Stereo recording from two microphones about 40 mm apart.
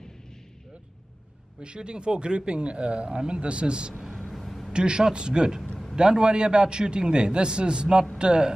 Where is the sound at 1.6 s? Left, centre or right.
Right.